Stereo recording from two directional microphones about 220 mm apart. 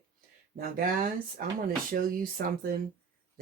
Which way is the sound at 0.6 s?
40° right (ahead or behind).